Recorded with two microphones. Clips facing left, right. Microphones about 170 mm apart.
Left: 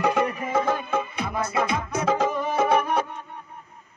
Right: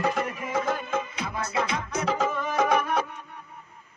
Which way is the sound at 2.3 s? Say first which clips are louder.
Left 2 dB; 30° left (ahead or behind).